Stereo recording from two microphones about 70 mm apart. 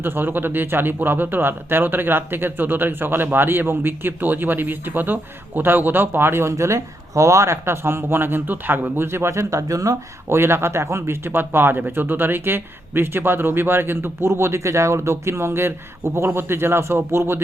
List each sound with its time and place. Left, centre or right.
0.0 s speech: right
10.2 s speech: right